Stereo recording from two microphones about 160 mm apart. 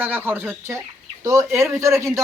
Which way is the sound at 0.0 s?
10° right (ahead or behind).